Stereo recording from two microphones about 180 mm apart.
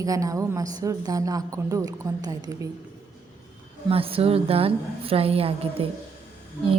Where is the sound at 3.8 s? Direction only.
30° right (ahead or behind).